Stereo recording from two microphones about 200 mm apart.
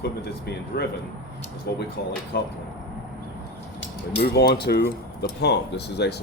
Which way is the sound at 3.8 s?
55° left (ahead or behind).